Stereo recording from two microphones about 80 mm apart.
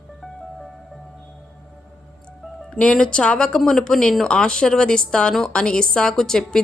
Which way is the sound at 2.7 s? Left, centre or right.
Centre.